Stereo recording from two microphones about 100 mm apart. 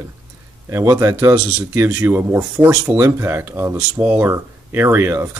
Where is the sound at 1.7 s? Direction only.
25° right (ahead or behind).